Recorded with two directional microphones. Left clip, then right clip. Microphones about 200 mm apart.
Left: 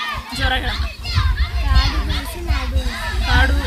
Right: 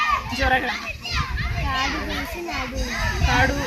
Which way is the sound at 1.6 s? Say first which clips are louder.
Even; 10° left (ahead or behind).